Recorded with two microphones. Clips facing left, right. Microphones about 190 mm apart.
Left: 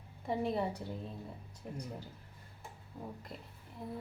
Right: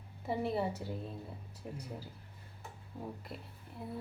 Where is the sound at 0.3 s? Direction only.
5° right (ahead or behind).